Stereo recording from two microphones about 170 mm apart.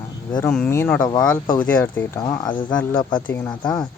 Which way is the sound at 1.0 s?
25° left (ahead or behind).